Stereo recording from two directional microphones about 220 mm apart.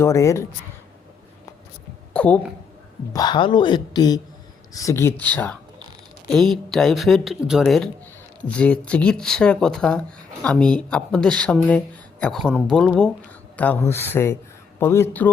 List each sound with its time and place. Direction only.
0.0 s speech: 15° left (ahead or behind)
2.1 s a sound: 5° left (ahead or behind)
3.1 s speech: 20° left (ahead or behind)